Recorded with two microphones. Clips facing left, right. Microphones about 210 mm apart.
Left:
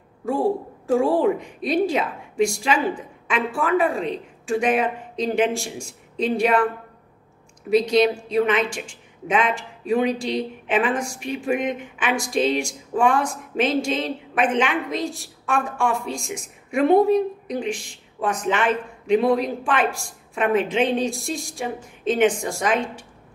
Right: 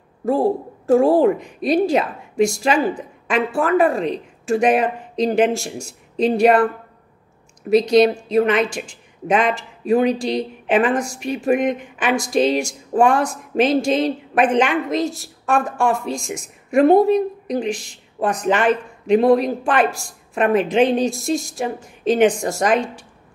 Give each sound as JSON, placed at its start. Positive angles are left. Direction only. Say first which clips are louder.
{"t": 0.8, "sound": "a woman's voice", "louder": "right 5 dB", "side_deg": -40}
{"t": 7.7, "sound": "a woman's voice", "louder": "right 4 dB", "side_deg": -40}